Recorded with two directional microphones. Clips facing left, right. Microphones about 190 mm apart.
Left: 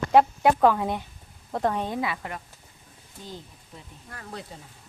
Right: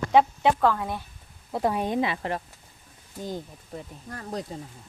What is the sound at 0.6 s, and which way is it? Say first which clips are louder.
Speech: left 3 dB; 20° left (ahead or behind).